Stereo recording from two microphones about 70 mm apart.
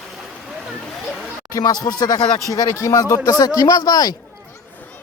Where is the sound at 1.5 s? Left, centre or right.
Left.